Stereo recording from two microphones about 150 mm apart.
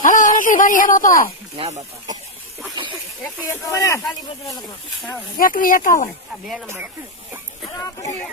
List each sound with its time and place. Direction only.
0.0 s a sound: 60° left (ahead or behind)
1.5 s speech: 45° right (ahead or behind)
3.4 s speech: 20° left (ahead or behind)
5.4 s speech: 70° left (ahead or behind)